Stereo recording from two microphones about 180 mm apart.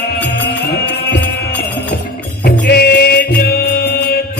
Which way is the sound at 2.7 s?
65° left (ahead or behind).